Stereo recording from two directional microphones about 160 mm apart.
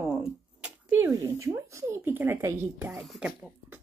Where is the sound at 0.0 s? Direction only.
10° right (ahead or behind).